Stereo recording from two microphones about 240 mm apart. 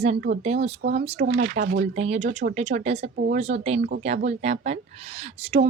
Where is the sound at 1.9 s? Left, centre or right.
Right.